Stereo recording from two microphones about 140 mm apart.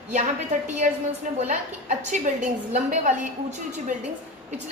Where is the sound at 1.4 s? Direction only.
60° right (ahead or behind).